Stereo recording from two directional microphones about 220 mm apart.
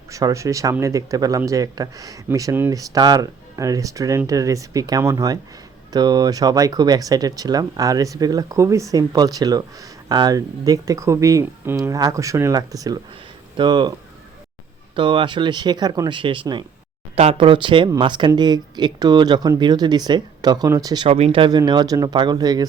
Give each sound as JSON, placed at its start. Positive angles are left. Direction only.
{"t": 0.1, "sound": "speech", "side_deg": -15}
{"t": 14.9, "sound": "speech", "side_deg": -20}